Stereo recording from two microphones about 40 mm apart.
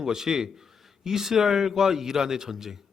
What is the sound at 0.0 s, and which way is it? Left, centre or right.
Speech, centre.